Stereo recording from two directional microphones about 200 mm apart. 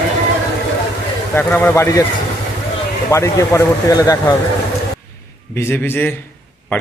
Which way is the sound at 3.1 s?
15° left (ahead or behind).